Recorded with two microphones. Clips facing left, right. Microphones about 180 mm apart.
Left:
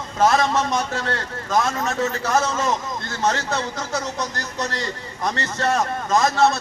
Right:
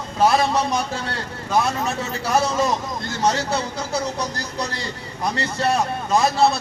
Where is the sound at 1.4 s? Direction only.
10° right (ahead or behind).